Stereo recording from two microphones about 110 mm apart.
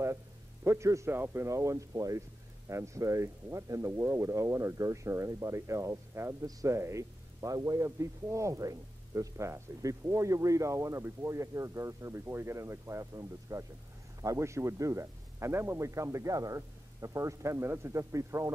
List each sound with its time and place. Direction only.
0.7 s speech: 25° right (ahead or behind)